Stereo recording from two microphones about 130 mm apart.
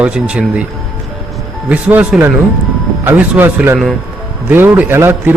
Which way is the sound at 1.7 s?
10° right (ahead or behind).